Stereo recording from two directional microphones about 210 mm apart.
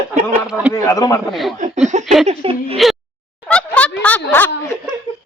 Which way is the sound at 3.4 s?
5° left (ahead or behind).